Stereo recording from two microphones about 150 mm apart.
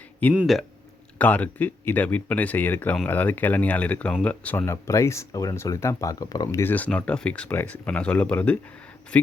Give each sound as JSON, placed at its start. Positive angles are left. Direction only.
{"t": 0.3, "sound": "speech", "side_deg": 0}
{"t": 6.6, "sound": "speech", "side_deg": 10}